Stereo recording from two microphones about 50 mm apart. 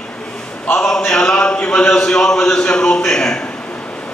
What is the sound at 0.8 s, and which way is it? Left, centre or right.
A man's voice, centre.